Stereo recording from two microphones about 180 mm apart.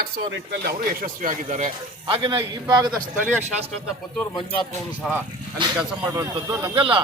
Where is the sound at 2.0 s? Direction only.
25° right (ahead or behind).